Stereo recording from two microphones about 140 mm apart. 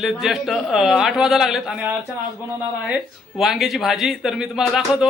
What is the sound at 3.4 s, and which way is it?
Speech, centre (ahead or behind).